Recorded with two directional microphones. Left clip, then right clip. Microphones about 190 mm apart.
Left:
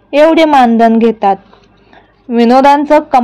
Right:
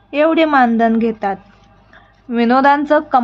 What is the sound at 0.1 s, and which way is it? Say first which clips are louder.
A woman's voice: left 6 dB; 20° left (ahead or behind).